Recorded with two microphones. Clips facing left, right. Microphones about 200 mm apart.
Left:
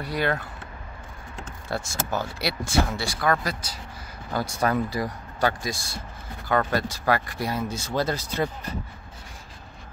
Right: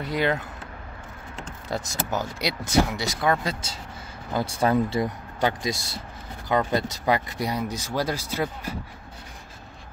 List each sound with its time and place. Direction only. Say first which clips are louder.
0.0 s speech: right 2 dB; 20° right (ahead or behind)